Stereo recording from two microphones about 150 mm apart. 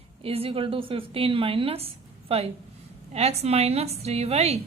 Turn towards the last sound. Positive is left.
turn(degrees=-45)  # may be behind; listen again after turning